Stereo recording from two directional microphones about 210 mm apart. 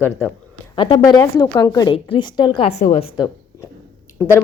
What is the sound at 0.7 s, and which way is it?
A woman's voice, 25° left (ahead or behind).